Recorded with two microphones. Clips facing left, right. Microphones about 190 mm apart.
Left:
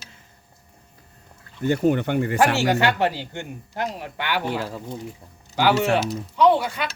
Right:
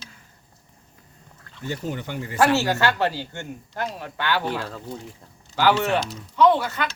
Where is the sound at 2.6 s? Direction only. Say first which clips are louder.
Left 2 dB; 15° left (ahead or behind).